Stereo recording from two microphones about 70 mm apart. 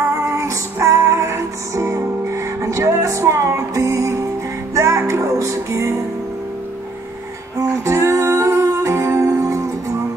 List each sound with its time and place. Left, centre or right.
0.1 s music: right
7.5 s music: right